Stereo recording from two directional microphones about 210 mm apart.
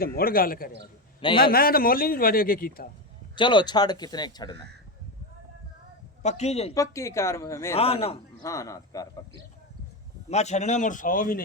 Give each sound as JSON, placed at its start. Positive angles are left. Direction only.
{"t": 0.0, "sound": "a man's voice", "side_deg": 45}
{"t": 1.2, "sound": "speech", "side_deg": 25}
{"t": 1.5, "sound": "a man's voice", "side_deg": 45}
{"t": 3.3, "sound": "speech", "side_deg": 20}
{"t": 6.2, "sound": "a man's voice", "side_deg": 30}
{"t": 6.7, "sound": "speech", "side_deg": 15}
{"t": 7.8, "sound": "speech", "side_deg": 30}
{"t": 8.4, "sound": "speech", "side_deg": 15}
{"t": 10.2, "sound": "a man's voice", "side_deg": 30}